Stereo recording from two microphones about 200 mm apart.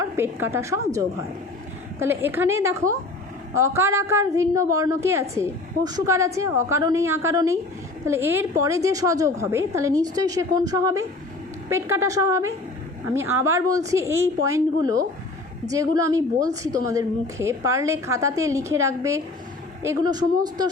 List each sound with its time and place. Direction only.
0.0 s a woman's voice: 10° right (ahead or behind)
2.0 s a woman's voice: 10° right (ahead or behind)
15.7 s a woman's voice: 15° right (ahead or behind)